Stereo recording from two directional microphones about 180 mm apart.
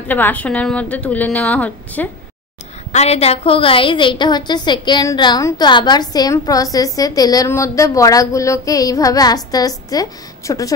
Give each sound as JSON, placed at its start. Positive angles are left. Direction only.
{"t": 0.1, "sound": "a woman's voice", "side_deg": 10}
{"t": 2.9, "sound": "a woman's voice", "side_deg": 35}